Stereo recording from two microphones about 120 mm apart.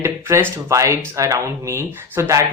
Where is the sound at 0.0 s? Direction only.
25° right (ahead or behind).